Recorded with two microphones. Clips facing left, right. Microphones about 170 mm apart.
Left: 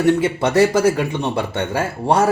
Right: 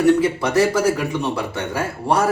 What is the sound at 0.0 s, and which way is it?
Speech, 30° left (ahead or behind).